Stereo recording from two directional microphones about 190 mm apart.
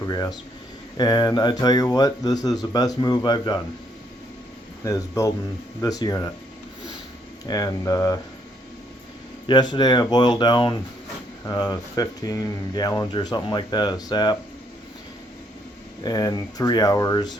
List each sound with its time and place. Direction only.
0.0 s speech: 20° left (ahead or behind)
4.8 s speech: 15° left (ahead or behind)
7.4 s speech: 20° left (ahead or behind)
9.5 s speech: 25° left (ahead or behind)
16.0 s speech: 20° left (ahead or behind)